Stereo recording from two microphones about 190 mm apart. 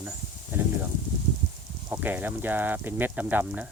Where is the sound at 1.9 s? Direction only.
10° right (ahead or behind).